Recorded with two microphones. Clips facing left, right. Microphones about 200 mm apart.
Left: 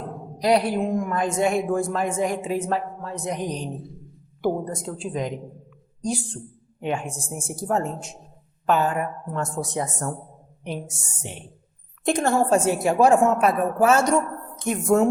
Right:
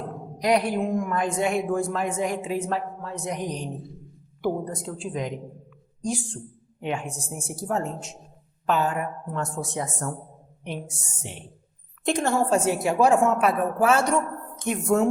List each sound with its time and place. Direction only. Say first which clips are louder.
0.3 s a woman's voice: left 2 dB; 35° left (ahead or behind)
4.4 s a woman's voice: left 2 dB; 45° left (ahead or behind)